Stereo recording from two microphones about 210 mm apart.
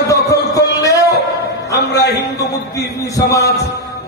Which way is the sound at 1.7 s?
50° left (ahead or behind).